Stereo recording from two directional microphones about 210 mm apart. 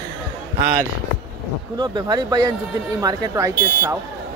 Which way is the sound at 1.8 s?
20° right (ahead or behind).